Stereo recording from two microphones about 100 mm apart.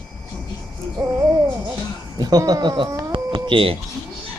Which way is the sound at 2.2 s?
40° right (ahead or behind).